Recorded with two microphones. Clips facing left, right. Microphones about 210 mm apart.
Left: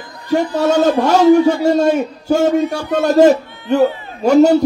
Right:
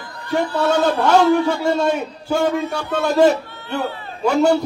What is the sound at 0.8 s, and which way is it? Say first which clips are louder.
A man's voice: left 3 dB; 40° left (ahead or behind).